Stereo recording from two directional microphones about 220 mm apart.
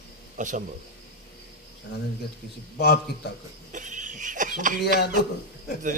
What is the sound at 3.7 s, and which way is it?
Speech, 35° right (ahead or behind).